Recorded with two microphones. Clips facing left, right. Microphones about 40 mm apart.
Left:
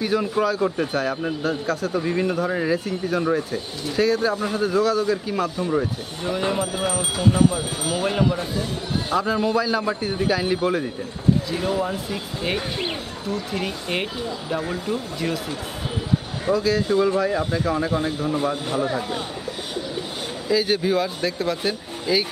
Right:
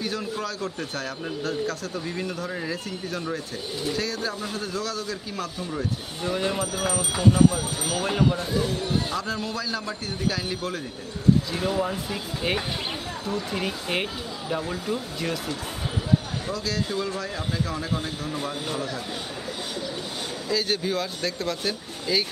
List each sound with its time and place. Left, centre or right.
0.0 s a man's voice: centre
2.0 s a man's voice: left
11.5 s speech: centre
16.5 s a man's voice: centre
20.4 s a man's voice: centre